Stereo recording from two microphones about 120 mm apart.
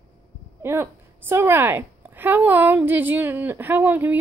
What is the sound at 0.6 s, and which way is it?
A woman's voice, 20° right (ahead or behind).